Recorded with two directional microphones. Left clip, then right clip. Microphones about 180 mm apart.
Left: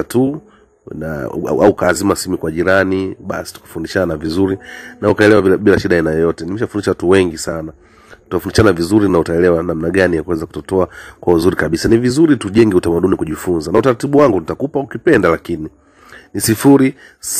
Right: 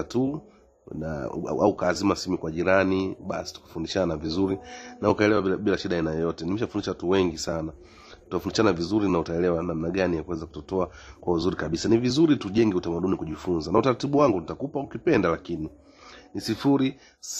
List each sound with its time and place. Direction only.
0.0 s speech: 30° left (ahead or behind)